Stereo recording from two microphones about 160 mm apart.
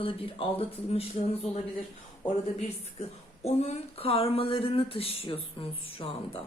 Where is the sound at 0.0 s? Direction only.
35° left (ahead or behind).